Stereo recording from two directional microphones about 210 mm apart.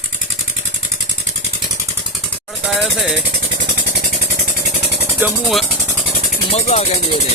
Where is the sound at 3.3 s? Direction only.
50° right (ahead or behind).